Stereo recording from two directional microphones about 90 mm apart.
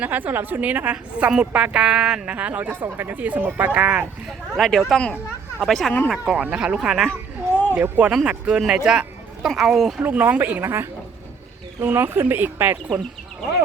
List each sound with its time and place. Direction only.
0.0 s a woman's voice: 20° right (ahead or behind)
4.3 s speech: centre (ahead or behind)
6.2 s a woman's voice: 15° right (ahead or behind)
7.7 s a woman's voice: 15° right (ahead or behind)
10.0 s a woman's voice: 20° right (ahead or behind)